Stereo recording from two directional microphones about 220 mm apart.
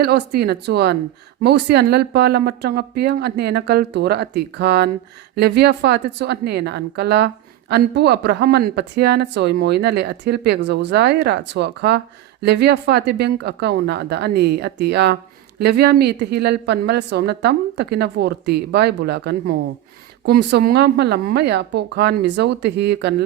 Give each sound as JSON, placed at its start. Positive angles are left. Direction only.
{"t": 0.0, "sound": "speech", "side_deg": -45}